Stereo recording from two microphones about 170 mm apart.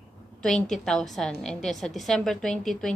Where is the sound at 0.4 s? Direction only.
5° left (ahead or behind).